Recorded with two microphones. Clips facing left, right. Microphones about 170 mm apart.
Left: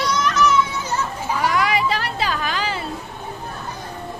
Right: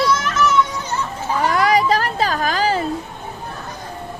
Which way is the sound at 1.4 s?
35° right (ahead or behind).